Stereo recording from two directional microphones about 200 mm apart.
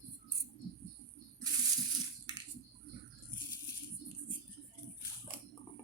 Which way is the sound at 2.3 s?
20° right (ahead or behind).